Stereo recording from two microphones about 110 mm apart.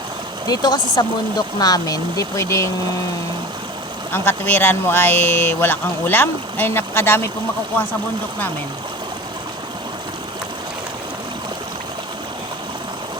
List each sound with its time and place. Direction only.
0.4 s speech: 40° left (ahead or behind)
4.1 s speech: 20° left (ahead or behind)